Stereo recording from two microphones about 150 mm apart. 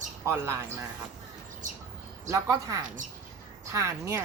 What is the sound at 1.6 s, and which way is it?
Speech, 60° right (ahead or behind).